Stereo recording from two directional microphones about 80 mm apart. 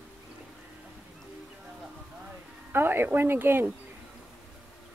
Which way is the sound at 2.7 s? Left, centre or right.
Right.